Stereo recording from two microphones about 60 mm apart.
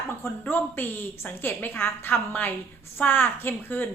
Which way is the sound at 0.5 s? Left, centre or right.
Left.